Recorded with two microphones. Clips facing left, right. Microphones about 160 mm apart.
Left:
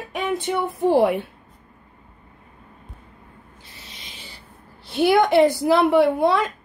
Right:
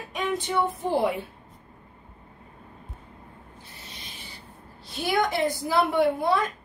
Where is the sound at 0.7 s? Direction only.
65° left (ahead or behind).